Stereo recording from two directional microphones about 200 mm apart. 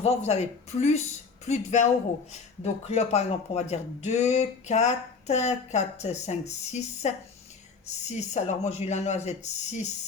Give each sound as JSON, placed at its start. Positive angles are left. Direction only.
{"t": 0.0, "sound": "speech", "side_deg": 30}